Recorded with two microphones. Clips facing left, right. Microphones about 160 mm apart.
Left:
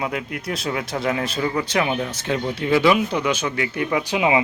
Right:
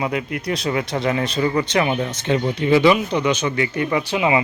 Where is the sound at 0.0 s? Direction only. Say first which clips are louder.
Right 3 dB; centre (ahead or behind).